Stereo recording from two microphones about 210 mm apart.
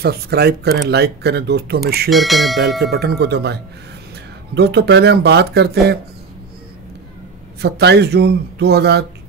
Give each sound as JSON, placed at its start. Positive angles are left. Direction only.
{"t": 0.0, "sound": "speech", "side_deg": -50}
{"t": 2.0, "sound": "speech", "side_deg": 0}
{"t": 2.8, "sound": "speech", "side_deg": -50}
{"t": 4.6, "sound": "speech", "side_deg": -50}
{"t": 7.6, "sound": "speech", "side_deg": -50}